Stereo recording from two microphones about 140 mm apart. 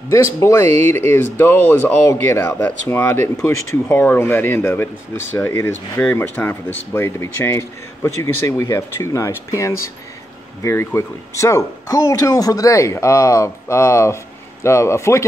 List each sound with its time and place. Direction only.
0.1 s speech: 20° left (ahead or behind)